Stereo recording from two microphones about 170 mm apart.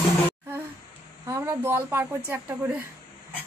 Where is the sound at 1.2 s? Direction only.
15° right (ahead or behind).